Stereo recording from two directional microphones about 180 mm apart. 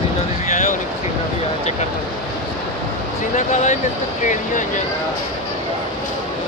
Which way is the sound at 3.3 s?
40° left (ahead or behind).